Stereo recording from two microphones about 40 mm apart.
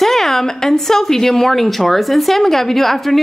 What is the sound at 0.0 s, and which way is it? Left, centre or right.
A woman's voice, centre.